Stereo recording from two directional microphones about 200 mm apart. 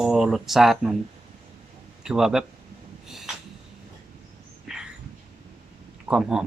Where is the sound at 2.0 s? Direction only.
5° right (ahead or behind).